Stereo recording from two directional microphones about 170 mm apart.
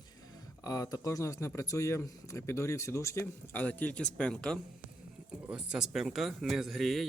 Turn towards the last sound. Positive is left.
turn(degrees=0)  # may be behind; listen again after turning